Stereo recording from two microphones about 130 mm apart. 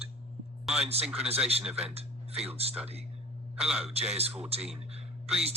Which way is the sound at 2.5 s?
50° right (ahead or behind).